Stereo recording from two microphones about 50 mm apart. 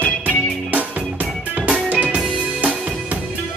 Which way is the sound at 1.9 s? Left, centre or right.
Right.